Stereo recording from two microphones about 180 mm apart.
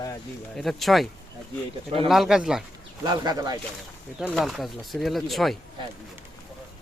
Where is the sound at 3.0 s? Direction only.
20° right (ahead or behind).